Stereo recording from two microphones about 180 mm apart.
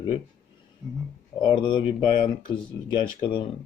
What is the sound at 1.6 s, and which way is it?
Speech, 25° left (ahead or behind).